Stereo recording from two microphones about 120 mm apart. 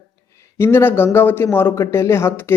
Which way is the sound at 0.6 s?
20° left (ahead or behind).